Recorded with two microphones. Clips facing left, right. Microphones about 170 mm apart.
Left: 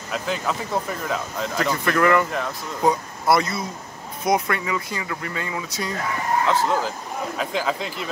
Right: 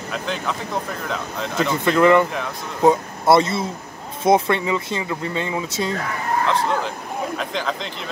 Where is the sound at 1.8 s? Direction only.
20° right (ahead or behind).